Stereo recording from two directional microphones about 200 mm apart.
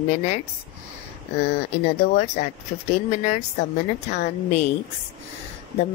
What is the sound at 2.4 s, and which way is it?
Speech, 35° left (ahead or behind).